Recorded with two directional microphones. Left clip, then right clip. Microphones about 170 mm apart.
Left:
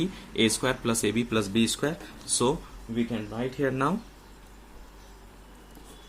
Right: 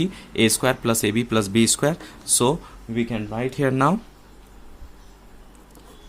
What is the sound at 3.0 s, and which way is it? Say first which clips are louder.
Speech: right 5 dB; 65° right (ahead or behind).